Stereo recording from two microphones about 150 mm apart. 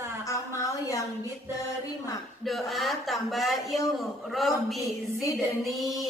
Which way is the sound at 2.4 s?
Centre (ahead or behind).